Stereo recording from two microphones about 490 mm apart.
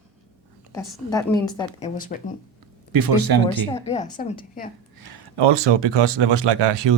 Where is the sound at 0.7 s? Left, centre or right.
Centre.